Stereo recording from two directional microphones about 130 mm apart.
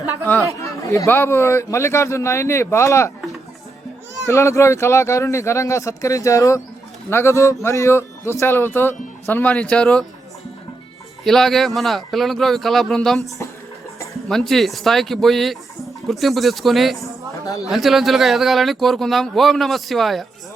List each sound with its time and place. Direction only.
0.6 s speech: 25° left (ahead or behind)
4.1 s speech: 25° left (ahead or behind)
11.2 s speech: centre (ahead or behind)
14.3 s speech: centre (ahead or behind)
17.4 s speech: 25° left (ahead or behind)
17.7 s speech: centre (ahead or behind)